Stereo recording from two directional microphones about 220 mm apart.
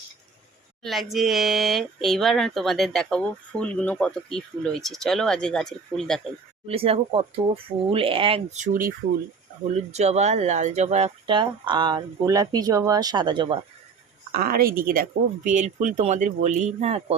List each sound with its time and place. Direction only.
0.8 s speech: centre (ahead or behind)
6.7 s speech: 25° right (ahead or behind)
14.3 s a woman's voice: 45° right (ahead or behind)